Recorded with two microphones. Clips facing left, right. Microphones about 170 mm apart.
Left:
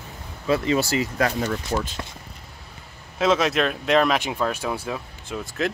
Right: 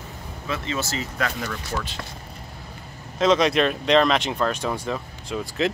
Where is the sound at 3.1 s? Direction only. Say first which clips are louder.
Right 2 dB; 5° left (ahead or behind).